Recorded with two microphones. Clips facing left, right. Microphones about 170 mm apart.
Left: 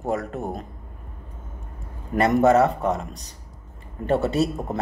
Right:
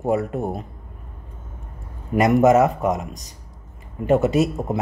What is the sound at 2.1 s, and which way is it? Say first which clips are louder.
Speech: right 2 dB; 15° right (ahead or behind).